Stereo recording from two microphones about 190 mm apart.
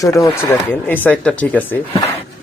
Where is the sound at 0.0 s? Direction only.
15° left (ahead or behind).